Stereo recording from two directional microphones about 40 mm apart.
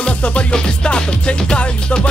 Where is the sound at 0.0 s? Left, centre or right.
Left.